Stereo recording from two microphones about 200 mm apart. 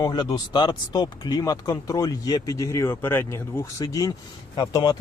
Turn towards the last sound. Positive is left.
turn(degrees=20)  # may be behind; listen again after turning